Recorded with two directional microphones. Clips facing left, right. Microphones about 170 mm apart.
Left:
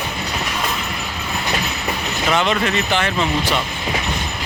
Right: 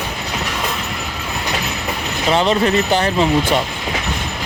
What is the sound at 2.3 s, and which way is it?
Speech, 35° right (ahead or behind).